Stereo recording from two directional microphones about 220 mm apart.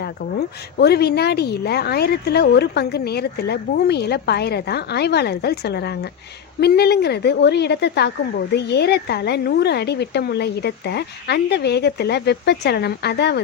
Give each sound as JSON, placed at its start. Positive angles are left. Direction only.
{"t": 0.0, "sound": "speech", "side_deg": 45}